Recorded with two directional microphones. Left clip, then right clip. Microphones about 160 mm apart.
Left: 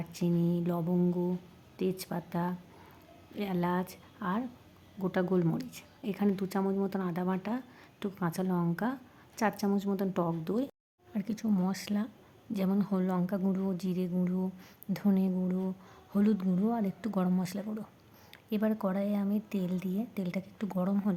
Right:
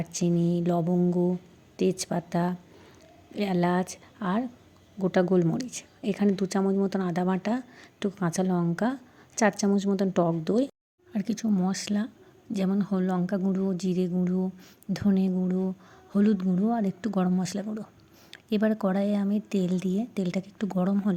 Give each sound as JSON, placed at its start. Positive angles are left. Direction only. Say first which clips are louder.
{"t": 0.0, "sound": "a woman's voice", "louder": "right 5 dB", "side_deg": -25}